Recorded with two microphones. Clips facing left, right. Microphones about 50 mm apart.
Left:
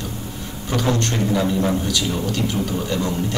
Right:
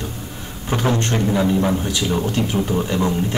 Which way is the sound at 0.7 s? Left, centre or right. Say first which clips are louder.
Right 1 dB; right.